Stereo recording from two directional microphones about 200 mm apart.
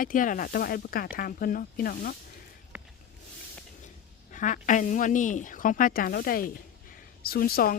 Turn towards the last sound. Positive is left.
turn(degrees=50)  # may be behind; listen again after turning